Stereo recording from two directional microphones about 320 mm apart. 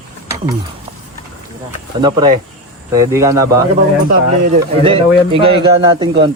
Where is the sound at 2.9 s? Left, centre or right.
Centre.